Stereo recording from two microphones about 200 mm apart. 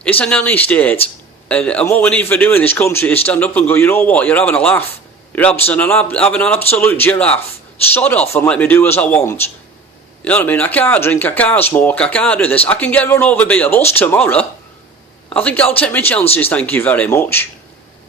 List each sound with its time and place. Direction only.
0.0 s a man's voice: 5° left (ahead or behind)